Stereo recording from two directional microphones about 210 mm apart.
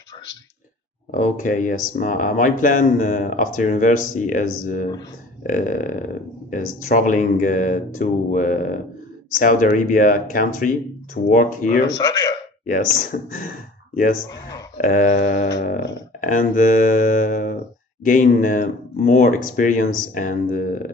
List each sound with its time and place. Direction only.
1.1 s speech: 40° left (ahead or behind)
11.9 s speech: 15° left (ahead or behind)
12.6 s speech: 40° left (ahead or behind)